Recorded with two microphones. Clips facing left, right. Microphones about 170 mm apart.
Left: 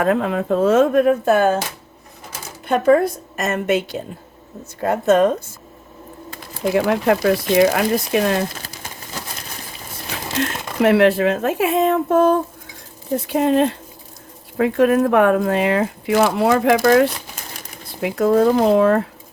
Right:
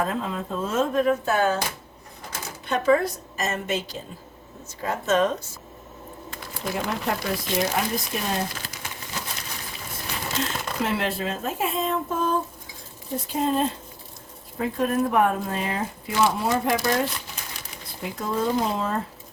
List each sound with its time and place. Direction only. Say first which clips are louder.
0.0 s speech: left 9 dB; 65° left (ahead or behind); by 1.5 s 50° left (ahead or behind)
2.6 s a woman's voice: left 6 dB; 50° left (ahead or behind)
6.7 s speech: left 11 dB; 85° left
10.8 s speech: left 15 dB; 65° left (ahead or behind)
18.0 s speech: left 11 dB; 70° left (ahead or behind)